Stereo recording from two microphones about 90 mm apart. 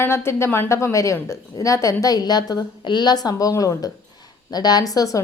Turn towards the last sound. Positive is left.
turn(degrees=40)  # may be behind; listen again after turning